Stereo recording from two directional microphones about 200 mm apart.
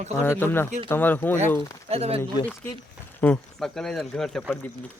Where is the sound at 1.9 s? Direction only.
30° right (ahead or behind).